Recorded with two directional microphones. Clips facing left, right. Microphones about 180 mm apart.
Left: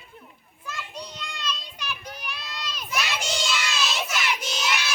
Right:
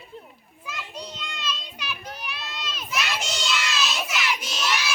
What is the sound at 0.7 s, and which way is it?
Children playing, 5° right (ahead or behind).